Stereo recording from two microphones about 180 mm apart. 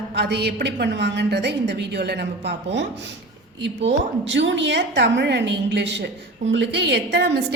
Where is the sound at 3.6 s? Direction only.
75° right (ahead or behind).